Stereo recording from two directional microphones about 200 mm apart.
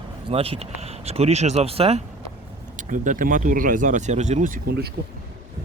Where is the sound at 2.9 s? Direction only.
40° right (ahead or behind).